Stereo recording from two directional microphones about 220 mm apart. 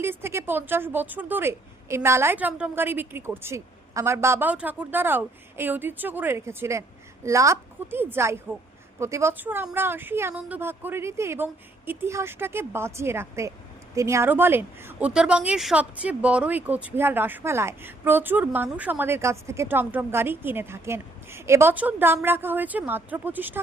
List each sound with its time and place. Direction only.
0.0 s a woman's voice: 10° right (ahead or behind)